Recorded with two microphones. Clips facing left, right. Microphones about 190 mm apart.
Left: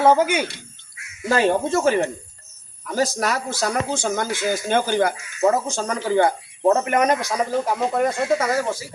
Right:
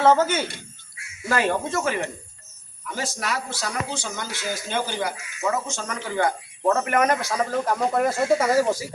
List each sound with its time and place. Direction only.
0.0 s speech: 10° left (ahead or behind)
1.2 s a man's voice: 30° left (ahead or behind); by 5.1 s 55° left (ahead or behind)
5.4 s speech: 35° left (ahead or behind); by 8.8 s 10° right (ahead or behind)